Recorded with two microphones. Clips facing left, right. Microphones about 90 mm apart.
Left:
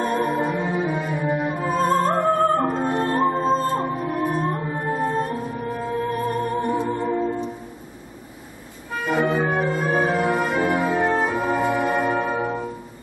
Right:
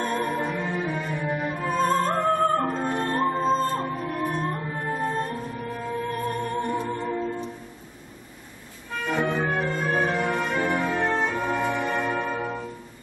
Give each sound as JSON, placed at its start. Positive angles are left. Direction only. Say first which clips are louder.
{"t": 0.0, "sound": "music", "louder": "left 4 dB", "side_deg": 10}
{"t": 8.9, "sound": "music", "louder": "left 4 dB", "side_deg": 10}